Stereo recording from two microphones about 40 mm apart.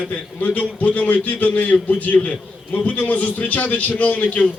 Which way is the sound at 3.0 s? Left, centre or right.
Left.